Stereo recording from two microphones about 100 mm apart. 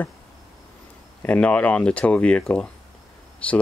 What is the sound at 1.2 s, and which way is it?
Speech, 15° left (ahead or behind).